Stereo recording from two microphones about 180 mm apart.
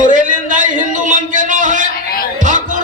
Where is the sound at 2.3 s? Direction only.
45° right (ahead or behind).